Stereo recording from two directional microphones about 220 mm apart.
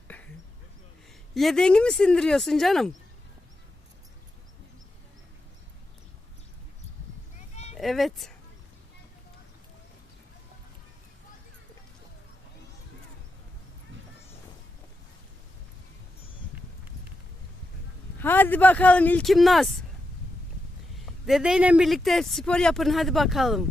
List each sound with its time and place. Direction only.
1.3 s speech: centre (ahead or behind)
7.5 s a sound: 30° left (ahead or behind)
7.8 s speech: centre (ahead or behind)
18.2 s speech: 10° left (ahead or behind)
21.2 s speech: 5° right (ahead or behind)